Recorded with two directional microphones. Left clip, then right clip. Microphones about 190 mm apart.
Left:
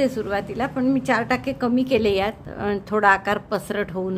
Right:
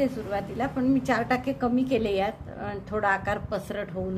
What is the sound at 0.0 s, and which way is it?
A woman's voice, 30° left (ahead or behind).